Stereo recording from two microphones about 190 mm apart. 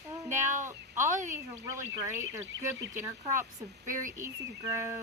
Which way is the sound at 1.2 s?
40° right (ahead or behind).